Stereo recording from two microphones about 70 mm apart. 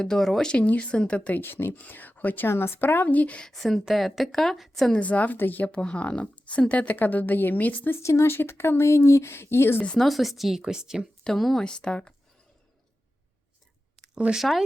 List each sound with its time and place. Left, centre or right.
0.0 s a woman's voice: centre
0.5 s a woman's voice: centre
1.4 s speech: left; by 3.5 s centre
3.5 s a woman's voice: centre
4.9 s speech: left
8.0 s speech: left
10.0 s a woman's voice: centre
11.2 s a woman's voice: centre
14.3 s a woman's voice: centre